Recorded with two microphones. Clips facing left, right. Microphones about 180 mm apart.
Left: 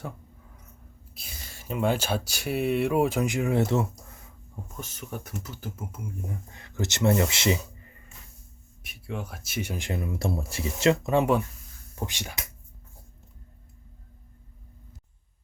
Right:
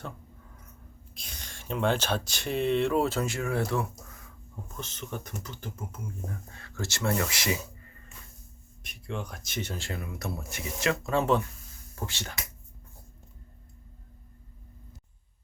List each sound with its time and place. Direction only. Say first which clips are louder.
1.1 s speech: left 1 dB; 5° left (ahead or behind); by 4.3 s 25° left (ahead or behind)
4.8 s speech: even; 10° left (ahead or behind); by 7.6 s 25° left (ahead or behind)
8.8 s speech: left 1 dB; 5° left (ahead or behind)